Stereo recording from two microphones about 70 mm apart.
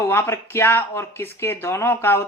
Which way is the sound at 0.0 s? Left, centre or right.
Left.